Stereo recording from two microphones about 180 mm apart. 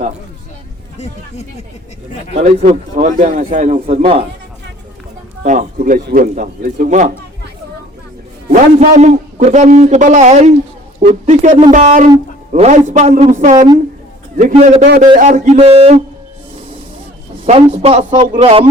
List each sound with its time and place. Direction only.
2.3 s a man's voice: 40° right (ahead or behind)
5.4 s speech: 45° right (ahead or behind)
8.4 s a man's voice: 40° right (ahead or behind)
17.4 s a man's voice: 35° right (ahead or behind)